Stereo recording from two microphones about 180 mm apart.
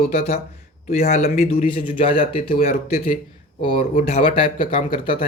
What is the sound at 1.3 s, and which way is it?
Speech, 35° left (ahead or behind).